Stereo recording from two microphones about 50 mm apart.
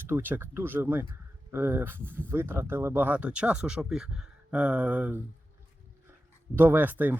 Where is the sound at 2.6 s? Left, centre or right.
Right.